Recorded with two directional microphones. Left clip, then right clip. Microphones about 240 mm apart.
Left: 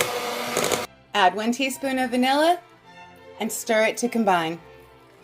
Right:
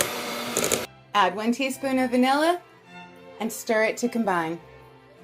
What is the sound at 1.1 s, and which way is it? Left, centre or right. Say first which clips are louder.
A woman's voice: left 2 dB; centre.